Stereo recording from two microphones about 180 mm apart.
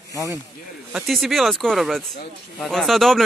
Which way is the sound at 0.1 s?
20° right (ahead or behind).